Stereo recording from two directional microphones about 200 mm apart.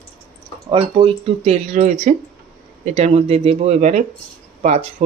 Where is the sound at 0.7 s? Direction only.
25° right (ahead or behind).